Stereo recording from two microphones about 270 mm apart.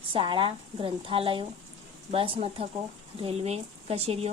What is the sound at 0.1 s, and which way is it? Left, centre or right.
A woman's voice, centre.